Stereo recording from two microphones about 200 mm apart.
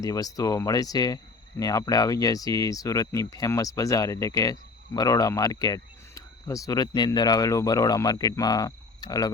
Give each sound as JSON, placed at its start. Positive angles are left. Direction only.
{"t": 0.0, "sound": "speech", "side_deg": 15}